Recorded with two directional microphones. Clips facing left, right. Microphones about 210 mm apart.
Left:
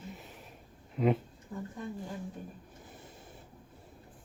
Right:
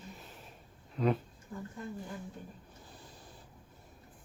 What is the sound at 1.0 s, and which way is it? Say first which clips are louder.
Speech: left 2 dB; 20° left (ahead or behind).